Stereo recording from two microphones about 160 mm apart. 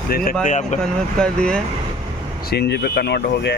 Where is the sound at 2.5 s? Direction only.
90° left.